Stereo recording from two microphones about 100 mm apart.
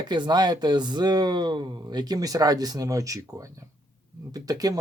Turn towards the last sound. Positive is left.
turn(degrees=-40)  # may be behind; listen again after turning